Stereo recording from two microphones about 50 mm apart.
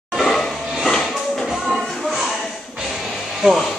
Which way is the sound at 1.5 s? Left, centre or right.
Centre.